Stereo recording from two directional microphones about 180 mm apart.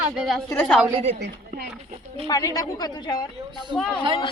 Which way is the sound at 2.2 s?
20° left (ahead or behind).